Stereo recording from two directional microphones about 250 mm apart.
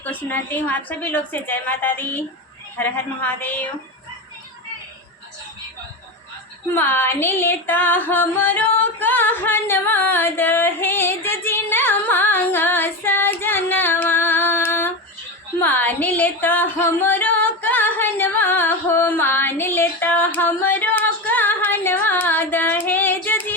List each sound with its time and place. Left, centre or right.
0.0 s a woman's voice: centre
6.7 s music: centre
15.5 s singing: centre